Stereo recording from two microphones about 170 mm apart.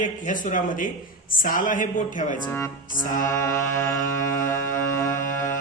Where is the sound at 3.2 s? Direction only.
20° left (ahead or behind).